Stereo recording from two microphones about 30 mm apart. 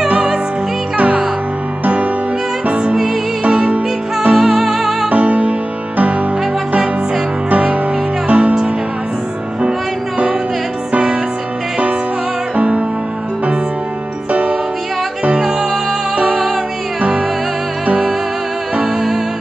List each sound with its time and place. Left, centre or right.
4.4 s music: centre
5.1 s music: right
7.5 s music: right
8.3 s music: right
12.5 s music: right
16.3 s music: centre